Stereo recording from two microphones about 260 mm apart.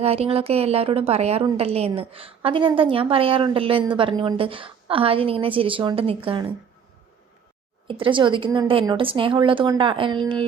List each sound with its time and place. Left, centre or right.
0.0 s a woman's voice: right
7.9 s a woman's voice: centre